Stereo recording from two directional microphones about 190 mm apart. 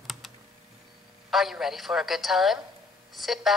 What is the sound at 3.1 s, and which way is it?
Speech, centre (ahead or behind).